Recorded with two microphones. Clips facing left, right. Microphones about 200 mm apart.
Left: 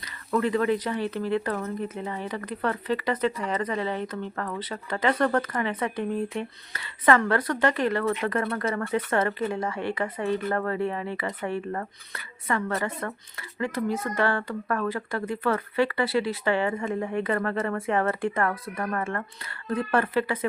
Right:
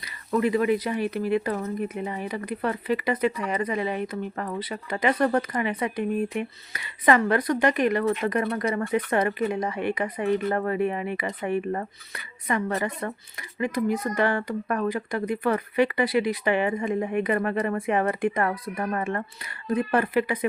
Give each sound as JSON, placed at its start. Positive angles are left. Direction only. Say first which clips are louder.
{"t": 0.0, "sound": "speech", "louder": "right 2 dB", "side_deg": -10}